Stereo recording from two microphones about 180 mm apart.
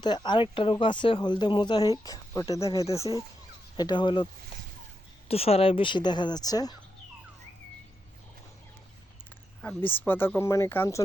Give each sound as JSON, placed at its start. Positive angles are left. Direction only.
{"t": 0.0, "sound": "speech", "side_deg": 25}
{"t": 5.3, "sound": "speech", "side_deg": 35}
{"t": 9.6, "sound": "speech", "side_deg": 10}